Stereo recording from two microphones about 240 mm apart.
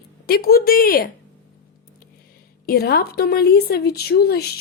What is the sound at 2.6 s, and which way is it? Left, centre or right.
A woman's voice, left.